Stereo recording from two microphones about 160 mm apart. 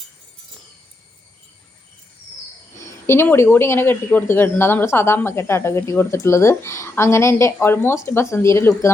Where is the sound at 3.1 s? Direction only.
15° left (ahead or behind).